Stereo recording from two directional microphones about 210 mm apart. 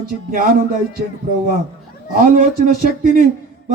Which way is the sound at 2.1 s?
40° right (ahead or behind).